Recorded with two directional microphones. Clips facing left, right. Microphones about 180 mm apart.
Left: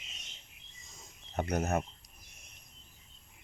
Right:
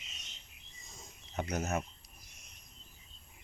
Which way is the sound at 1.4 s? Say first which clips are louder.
Left 3 dB; 55° left (ahead or behind).